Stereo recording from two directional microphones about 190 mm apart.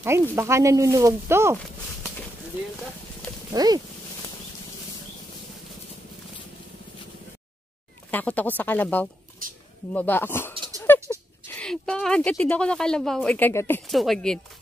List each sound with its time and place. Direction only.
0.0 s speech: 15° right (ahead or behind)
3.5 s speech: 20° right (ahead or behind)
8.1 s speech: 10° left (ahead or behind)
10.9 s a sound: 10° left (ahead or behind)
11.4 s a woman's voice: 5° left (ahead or behind)
13.8 s a woman's voice: centre (ahead or behind)